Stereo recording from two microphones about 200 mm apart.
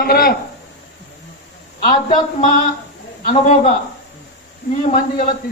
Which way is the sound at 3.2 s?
25° left (ahead or behind).